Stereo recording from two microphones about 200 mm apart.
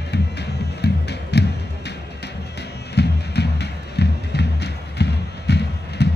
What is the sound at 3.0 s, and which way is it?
Music, 55° left (ahead or behind).